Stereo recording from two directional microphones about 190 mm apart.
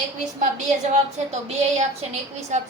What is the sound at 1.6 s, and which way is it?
A woman's voice, 35° right (ahead or behind).